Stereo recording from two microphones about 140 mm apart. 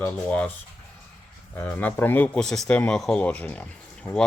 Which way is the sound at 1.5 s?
10° left (ahead or behind).